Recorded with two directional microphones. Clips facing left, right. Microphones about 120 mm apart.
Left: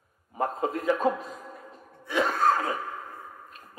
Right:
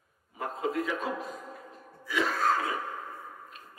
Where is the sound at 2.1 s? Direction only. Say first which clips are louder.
Left 4 dB; 40° left (ahead or behind).